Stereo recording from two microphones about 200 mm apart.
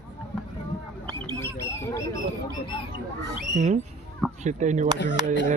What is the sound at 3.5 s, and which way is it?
Speech, 35° right (ahead or behind).